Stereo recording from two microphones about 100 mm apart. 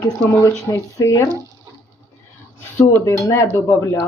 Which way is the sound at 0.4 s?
30° left (ahead or behind).